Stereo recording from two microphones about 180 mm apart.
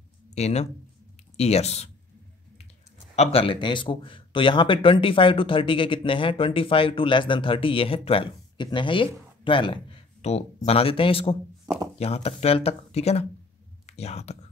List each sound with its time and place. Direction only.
0.3 s speech: 35° left (ahead or behind)
3.2 s speech: 35° left (ahead or behind)